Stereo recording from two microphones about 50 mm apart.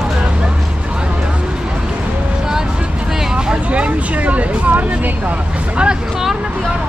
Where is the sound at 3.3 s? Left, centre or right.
Centre.